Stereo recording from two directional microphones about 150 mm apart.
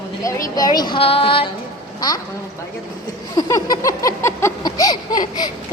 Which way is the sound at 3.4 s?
25° left (ahead or behind).